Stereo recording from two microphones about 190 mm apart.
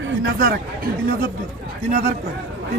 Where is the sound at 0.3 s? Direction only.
50° right (ahead or behind).